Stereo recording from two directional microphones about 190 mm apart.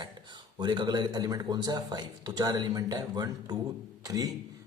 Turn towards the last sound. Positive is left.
turn(degrees=-20)  # may be behind; listen again after turning